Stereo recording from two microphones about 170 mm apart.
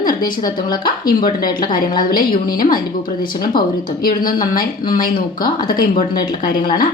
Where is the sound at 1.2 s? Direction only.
25° left (ahead or behind).